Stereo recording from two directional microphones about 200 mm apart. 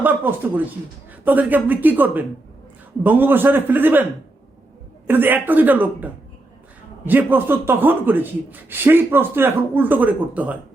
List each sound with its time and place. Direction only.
0.0 s a man's voice: 10° right (ahead or behind)
5.0 s a man's voice: 10° right (ahead or behind)